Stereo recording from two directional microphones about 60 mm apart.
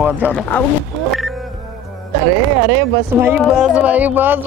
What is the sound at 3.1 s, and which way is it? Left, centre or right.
Speech, right.